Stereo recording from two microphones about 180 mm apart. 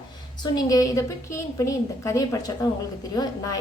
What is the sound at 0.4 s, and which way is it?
A woman's voice, 20° left (ahead or behind).